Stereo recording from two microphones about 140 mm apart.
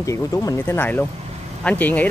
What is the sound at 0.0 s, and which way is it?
Speech, 20° left (ahead or behind).